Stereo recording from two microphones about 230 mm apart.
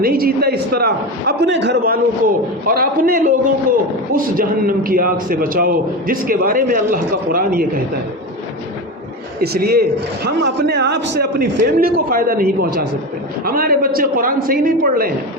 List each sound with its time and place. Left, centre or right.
0.0 s a man's voice: right
9.4 s a man's voice: right